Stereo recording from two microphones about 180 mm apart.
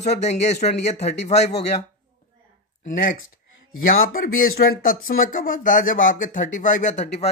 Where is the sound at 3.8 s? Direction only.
50° left (ahead or behind).